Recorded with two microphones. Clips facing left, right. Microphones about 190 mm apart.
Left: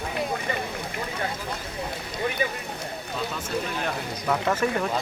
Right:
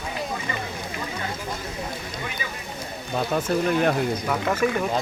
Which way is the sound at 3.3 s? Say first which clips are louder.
Right 11 dB; 55° right (ahead or behind).